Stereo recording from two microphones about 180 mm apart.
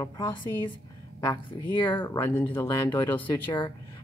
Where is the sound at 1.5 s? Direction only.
25° left (ahead or behind).